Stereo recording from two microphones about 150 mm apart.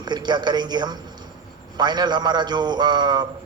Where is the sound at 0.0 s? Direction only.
30° right (ahead or behind).